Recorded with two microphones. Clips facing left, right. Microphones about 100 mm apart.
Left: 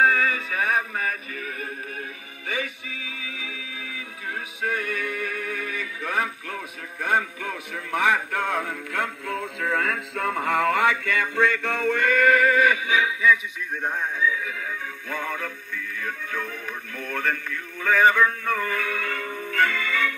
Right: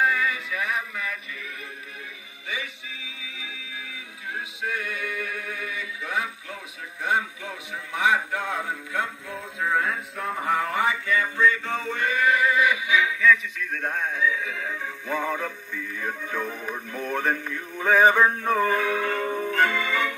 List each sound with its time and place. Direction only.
0.0 s music: 40° left (ahead or behind)
4.6 s music: 50° left (ahead or behind)
7.0 s speech: 50° left (ahead or behind)
12.9 s music: 15° left (ahead or behind)
15.0 s music: 15° right (ahead or behind)